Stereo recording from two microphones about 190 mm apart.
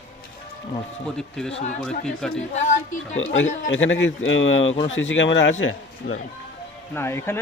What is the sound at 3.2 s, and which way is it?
Speech, 85° left.